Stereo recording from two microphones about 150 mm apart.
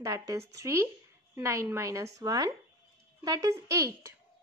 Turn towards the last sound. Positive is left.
turn(degrees=-20)  # may be behind; listen again after turning